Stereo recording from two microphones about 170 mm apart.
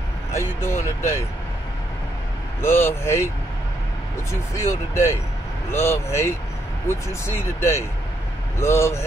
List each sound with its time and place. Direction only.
0.3 s speech: 15° left (ahead or behind)
2.6 s speech: 15° left (ahead or behind)
4.3 s speech: 15° left (ahead or behind)